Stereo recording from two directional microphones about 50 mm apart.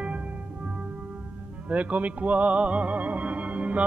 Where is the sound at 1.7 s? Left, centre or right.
Right.